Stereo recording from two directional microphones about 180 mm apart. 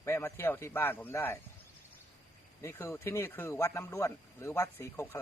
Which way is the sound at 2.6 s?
15° left (ahead or behind).